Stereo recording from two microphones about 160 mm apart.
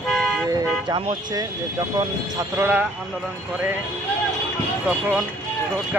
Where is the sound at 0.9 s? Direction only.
25° right (ahead or behind).